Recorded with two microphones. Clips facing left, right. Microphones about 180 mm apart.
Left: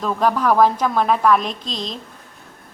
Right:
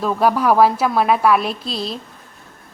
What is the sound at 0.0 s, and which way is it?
A woman's voice, 10° right (ahead or behind).